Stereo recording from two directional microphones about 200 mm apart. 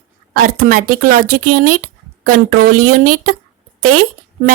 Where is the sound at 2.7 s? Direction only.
90° right.